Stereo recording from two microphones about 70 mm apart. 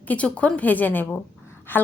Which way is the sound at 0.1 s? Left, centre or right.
Centre.